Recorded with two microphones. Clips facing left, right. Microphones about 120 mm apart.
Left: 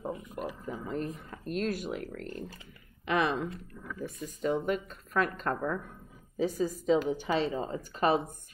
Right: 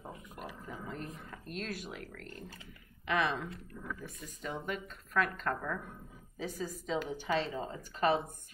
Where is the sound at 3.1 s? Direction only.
20° left (ahead or behind).